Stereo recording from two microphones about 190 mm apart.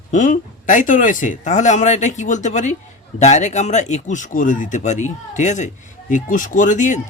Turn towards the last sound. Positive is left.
turn(degrees=40)  # may be behind; listen again after turning